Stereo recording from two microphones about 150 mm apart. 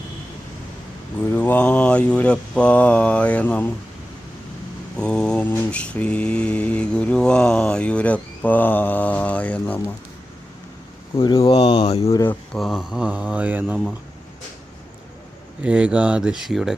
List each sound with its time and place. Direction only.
1.2 s mantra: 10° left (ahead or behind)
4.9 s mantra: 5° left (ahead or behind)
11.2 s speech: 30° left (ahead or behind)
12.0 s mantra: 15° left (ahead or behind)
12.5 s mantra: centre (ahead or behind)
15.6 s mantra: 10° right (ahead or behind)